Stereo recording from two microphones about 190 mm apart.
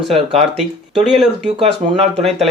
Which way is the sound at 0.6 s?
Centre (ahead or behind).